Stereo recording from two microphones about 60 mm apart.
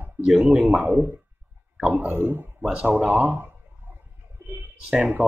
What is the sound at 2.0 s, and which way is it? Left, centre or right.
Speech, right.